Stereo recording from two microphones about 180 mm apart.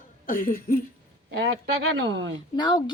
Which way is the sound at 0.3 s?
50° left (ahead or behind).